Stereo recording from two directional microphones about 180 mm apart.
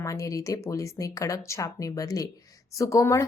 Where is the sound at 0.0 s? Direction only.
15° left (ahead or behind).